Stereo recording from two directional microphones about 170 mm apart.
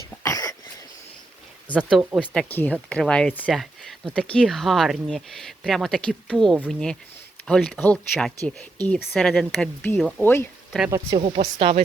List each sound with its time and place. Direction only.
0.2 s a sound: 20° left (ahead or behind)
1.7 s speech: 5° right (ahead or behind)
2.2 s speech: 5° left (ahead or behind)
10.8 s speech: 15° right (ahead or behind)
11.3 s speech: 35° right (ahead or behind)